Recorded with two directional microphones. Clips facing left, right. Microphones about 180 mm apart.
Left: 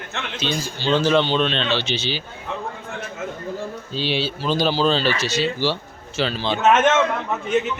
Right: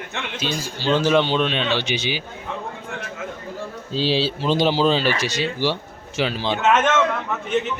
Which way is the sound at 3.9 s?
35° right (ahead or behind).